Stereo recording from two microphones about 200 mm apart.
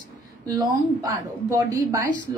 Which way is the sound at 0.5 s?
15° right (ahead or behind).